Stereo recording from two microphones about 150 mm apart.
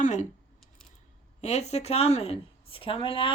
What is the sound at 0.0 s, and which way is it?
Speech, 55° left (ahead or behind).